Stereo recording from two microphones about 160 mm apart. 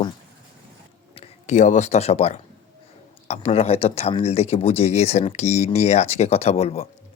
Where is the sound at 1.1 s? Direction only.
35° left (ahead or behind).